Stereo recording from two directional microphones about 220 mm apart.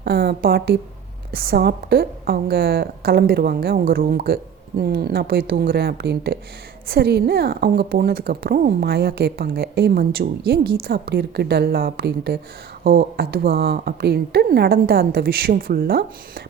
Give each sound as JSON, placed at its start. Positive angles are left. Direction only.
{"t": 0.0, "sound": "a woman's voice", "side_deg": -45}